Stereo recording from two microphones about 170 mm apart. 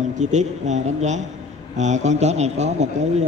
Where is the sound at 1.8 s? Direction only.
45° right (ahead or behind).